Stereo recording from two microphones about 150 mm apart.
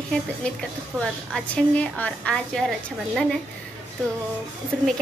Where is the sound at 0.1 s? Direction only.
5° left (ahead or behind).